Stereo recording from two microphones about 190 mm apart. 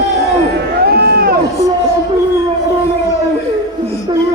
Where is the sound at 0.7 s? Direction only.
55° right (ahead or behind).